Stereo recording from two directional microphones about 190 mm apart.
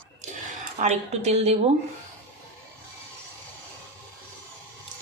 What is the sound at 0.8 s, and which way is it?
Speech, 35° right (ahead or behind).